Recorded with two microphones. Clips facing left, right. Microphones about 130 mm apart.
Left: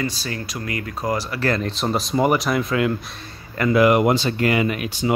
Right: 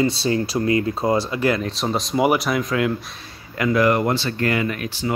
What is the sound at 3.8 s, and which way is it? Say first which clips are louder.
Speech: left 4 dB; 15° left (ahead or behind).